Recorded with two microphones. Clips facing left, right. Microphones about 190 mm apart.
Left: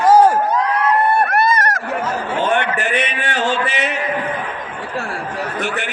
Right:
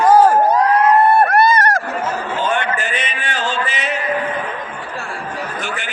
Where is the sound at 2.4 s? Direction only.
60° left (ahead or behind).